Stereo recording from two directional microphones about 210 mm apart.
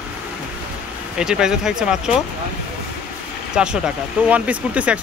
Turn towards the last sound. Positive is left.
turn(degrees=-5)  # may be behind; listen again after turning